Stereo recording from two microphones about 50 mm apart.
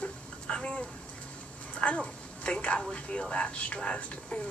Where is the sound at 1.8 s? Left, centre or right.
Left.